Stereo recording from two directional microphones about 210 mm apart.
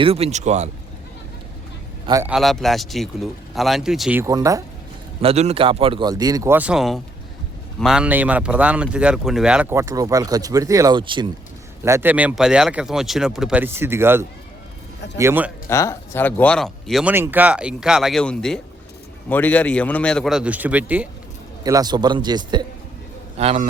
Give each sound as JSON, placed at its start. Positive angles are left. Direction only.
{"t": 0.0, "sound": "speech", "side_deg": -30}
{"t": 2.0, "sound": "speech", "side_deg": -15}
{"t": 2.3, "sound": "speech", "side_deg": 0}
{"t": 4.2, "sound": "speech", "side_deg": -15}
{"t": 5.2, "sound": "a man's voice", "side_deg": -30}
{"t": 11.8, "sound": "speech", "side_deg": -10}
{"t": 15.7, "sound": "speech", "side_deg": 15}
{"t": 21.6, "sound": "a man's voice", "side_deg": -15}